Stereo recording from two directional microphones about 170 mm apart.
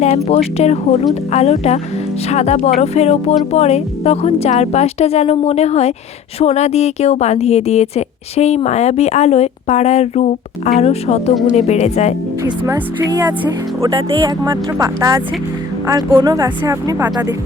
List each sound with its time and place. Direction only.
0.3 s a woman's voice: 40° left (ahead or behind)
12.4 s speech: 15° right (ahead or behind)
13.1 s music: 20° right (ahead or behind)